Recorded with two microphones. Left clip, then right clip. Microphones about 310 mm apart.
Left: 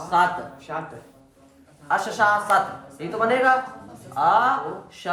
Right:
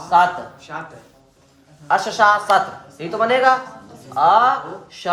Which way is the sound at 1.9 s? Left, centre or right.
Right.